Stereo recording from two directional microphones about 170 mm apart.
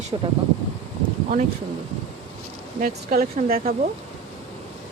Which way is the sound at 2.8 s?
55° right (ahead or behind).